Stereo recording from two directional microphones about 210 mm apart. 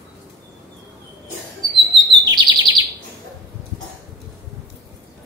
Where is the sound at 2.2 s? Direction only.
20° right (ahead or behind).